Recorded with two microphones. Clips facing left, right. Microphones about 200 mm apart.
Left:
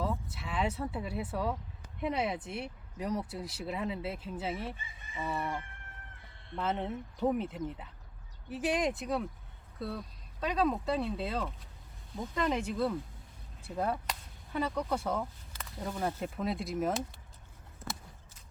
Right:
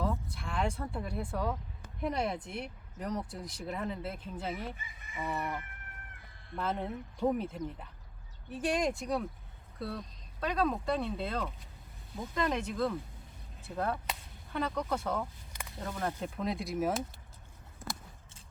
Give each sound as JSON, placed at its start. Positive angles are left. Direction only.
{"t": 0.0, "sound": "a sound", "side_deg": 5}
{"t": 2.0, "sound": "speech", "side_deg": 5}
{"t": 4.8, "sound": "chicken", "side_deg": 30}
{"t": 6.8, "sound": "speech", "side_deg": 0}